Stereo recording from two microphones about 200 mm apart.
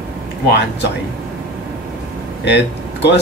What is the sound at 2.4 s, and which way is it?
Speech, 60° left (ahead or behind).